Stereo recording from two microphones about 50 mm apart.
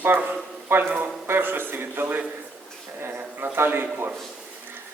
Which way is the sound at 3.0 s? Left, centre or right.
Right.